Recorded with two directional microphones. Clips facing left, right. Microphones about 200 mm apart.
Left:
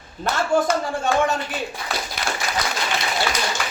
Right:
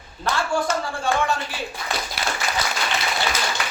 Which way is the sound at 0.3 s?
20° left (ahead or behind).